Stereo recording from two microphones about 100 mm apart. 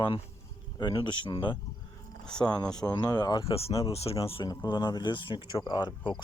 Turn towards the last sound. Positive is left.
turn(degrees=45)  # may be behind; listen again after turning